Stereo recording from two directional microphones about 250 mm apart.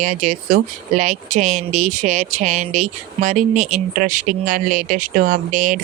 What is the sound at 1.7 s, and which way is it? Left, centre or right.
Speech, right.